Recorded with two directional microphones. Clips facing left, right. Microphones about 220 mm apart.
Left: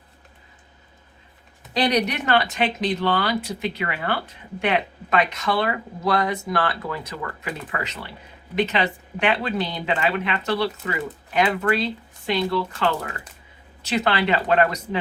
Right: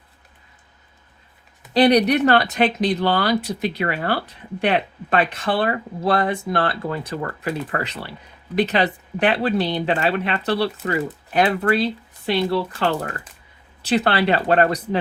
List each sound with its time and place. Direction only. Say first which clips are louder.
1.9 s speech: right 4 dB; 35° right (ahead or behind)
13.8 s speech: right 3 dB; 35° right (ahead or behind)